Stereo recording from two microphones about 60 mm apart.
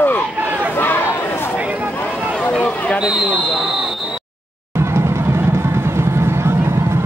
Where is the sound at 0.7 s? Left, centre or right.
Left.